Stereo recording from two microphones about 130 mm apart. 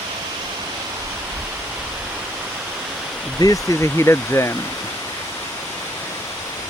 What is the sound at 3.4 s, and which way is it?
Speech, 25° left (ahead or behind).